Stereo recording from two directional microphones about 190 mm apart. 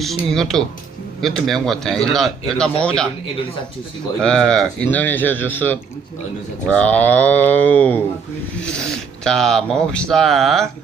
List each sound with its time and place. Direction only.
0.0 s speech: centre (ahead or behind)
4.2 s speech: 5° left (ahead or behind)